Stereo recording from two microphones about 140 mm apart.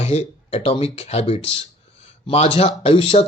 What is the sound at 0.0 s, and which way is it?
Speech, 50° left (ahead or behind).